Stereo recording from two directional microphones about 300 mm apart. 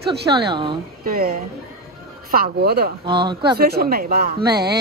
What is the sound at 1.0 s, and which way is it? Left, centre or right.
Speech, right.